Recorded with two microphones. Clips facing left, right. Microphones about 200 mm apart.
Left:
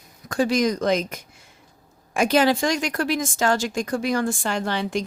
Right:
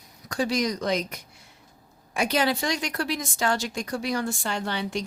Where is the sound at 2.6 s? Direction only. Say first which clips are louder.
Left 5 dB; 50° left (ahead or behind).